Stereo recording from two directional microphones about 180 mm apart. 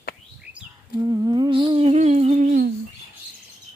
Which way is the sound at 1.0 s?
20° right (ahead or behind).